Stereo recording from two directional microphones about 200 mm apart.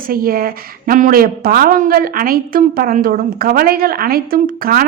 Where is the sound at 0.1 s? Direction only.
50° right (ahead or behind).